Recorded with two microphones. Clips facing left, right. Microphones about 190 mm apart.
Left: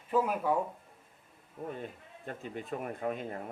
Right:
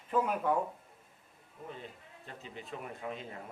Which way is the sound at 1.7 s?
50° left (ahead or behind).